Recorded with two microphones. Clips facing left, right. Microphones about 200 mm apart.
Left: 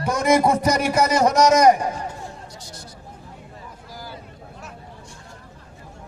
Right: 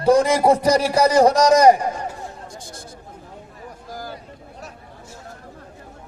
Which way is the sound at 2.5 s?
50° right (ahead or behind).